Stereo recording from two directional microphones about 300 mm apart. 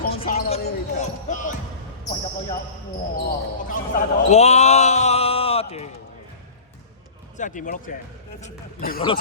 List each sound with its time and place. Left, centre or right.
0.0 s basketball bounce: left
3.2 s basketball bounce: left
7.3 s a man's voice: left